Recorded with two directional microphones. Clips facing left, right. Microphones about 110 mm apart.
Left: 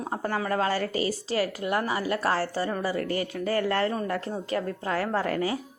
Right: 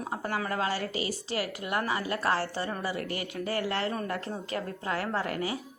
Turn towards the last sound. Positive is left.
turn(degrees=35)  # may be behind; listen again after turning